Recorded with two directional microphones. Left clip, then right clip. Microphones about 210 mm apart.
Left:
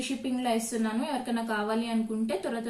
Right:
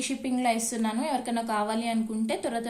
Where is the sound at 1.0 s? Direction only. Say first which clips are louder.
Right 3 dB; 35° right (ahead or behind).